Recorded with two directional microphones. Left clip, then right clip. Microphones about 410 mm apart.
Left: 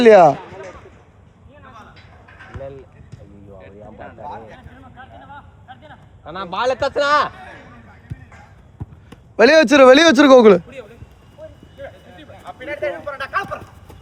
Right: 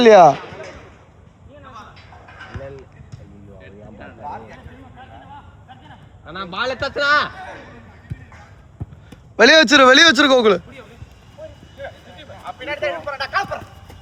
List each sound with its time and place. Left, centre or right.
0.0 s speech: centre
3.6 s vehicle: centre
6.2 s a man's voice: centre
9.3 s a man's voice: centre
12.5 s a sound: right